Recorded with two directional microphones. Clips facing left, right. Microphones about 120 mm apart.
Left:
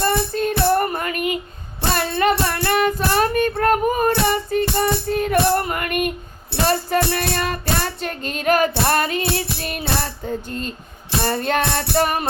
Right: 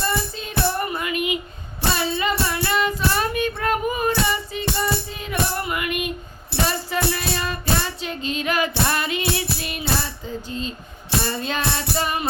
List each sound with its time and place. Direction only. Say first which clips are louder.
0.0 s music: left 6 dB; 55° left (ahead or behind)
1.9 s music: left 4 dB; 60° left (ahead or behind)
2.5 s child singing: left 3 dB; 55° left (ahead or behind)
6.7 s music: left 7 dB; 55° left (ahead or behind)